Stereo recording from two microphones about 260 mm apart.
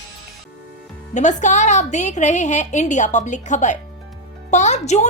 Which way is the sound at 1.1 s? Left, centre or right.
Left.